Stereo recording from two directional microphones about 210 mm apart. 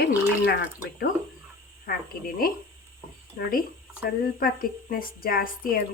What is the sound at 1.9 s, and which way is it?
Speech, 45° left (ahead or behind).